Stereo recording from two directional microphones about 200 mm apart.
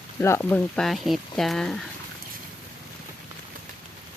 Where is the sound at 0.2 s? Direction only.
10° left (ahead or behind).